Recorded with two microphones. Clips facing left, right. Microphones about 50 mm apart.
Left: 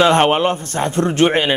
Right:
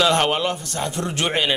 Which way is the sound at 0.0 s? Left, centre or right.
Left.